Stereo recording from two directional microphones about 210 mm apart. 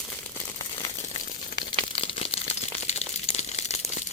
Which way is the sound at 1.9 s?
25° left (ahead or behind).